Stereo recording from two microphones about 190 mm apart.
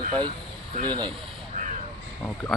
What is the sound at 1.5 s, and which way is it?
Crow, 40° right (ahead or behind).